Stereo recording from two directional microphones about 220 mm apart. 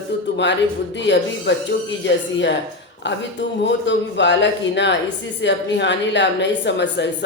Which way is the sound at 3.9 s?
55° left (ahead or behind).